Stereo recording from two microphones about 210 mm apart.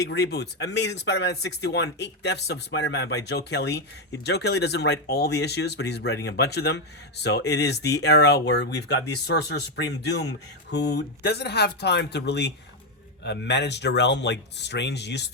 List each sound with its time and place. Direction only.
0.0 s speech: 50° left (ahead or behind)